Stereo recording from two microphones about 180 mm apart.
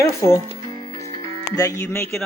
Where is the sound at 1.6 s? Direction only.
15° left (ahead or behind).